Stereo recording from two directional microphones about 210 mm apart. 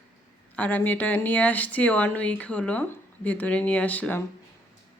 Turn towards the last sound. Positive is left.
turn(degrees=5)  # may be behind; listen again after turning